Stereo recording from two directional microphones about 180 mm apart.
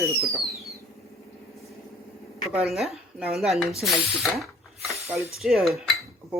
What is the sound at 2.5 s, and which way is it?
Speech, centre (ahead or behind).